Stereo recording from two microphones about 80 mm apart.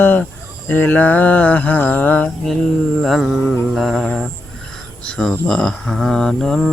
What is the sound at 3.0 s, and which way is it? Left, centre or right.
Mantra, centre.